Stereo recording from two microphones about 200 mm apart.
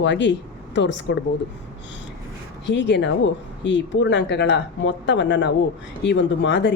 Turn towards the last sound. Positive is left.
turn(degrees=60)  # may be behind; listen again after turning